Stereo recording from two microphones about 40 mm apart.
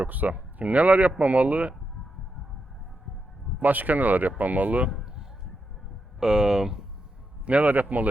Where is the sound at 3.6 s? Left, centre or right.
Right.